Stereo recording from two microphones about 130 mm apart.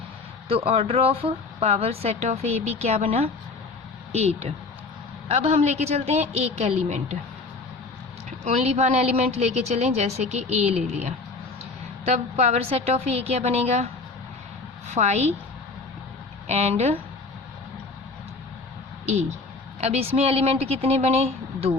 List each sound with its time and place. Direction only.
0.4 s a woman's voice: 50° right (ahead or behind)
8.4 s a woman's voice: 60° right (ahead or behind)
14.8 s a woman's voice: 60° right (ahead or behind)
16.5 s a woman's voice: 55° right (ahead or behind)
19.8 s speech: 55° right (ahead or behind)